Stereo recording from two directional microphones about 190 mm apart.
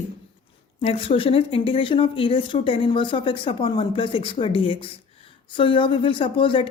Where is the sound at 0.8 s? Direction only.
30° left (ahead or behind).